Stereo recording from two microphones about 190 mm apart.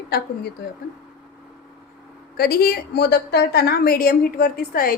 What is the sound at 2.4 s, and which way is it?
A woman's voice, 50° left (ahead or behind).